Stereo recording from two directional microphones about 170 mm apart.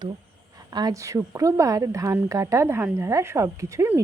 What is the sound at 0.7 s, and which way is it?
A woman's voice, 20° right (ahead or behind).